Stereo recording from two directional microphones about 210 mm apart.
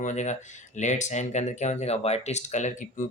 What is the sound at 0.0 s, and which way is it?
Speech, 35° left (ahead or behind).